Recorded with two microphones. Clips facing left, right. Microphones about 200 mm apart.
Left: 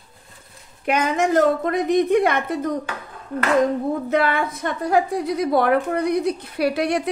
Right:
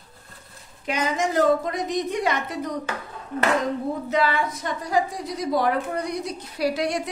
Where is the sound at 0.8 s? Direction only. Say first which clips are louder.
Left 4 dB; 60° left (ahead or behind).